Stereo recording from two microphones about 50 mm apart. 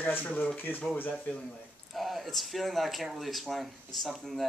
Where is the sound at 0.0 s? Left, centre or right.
Left.